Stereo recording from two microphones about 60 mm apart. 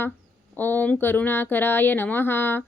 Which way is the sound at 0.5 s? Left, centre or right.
Left.